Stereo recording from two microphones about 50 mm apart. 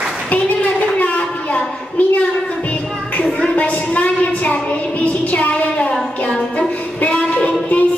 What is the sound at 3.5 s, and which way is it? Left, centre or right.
A woman's voice, left.